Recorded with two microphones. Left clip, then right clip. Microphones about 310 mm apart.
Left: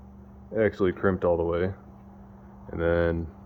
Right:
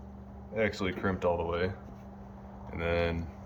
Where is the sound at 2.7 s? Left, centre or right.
Left.